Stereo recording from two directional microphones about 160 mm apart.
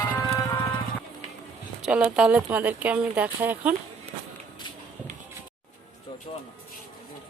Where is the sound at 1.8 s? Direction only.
5° right (ahead or behind).